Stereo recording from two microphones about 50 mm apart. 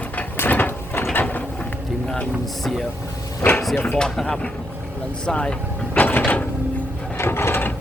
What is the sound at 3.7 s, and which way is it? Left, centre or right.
Speech, left.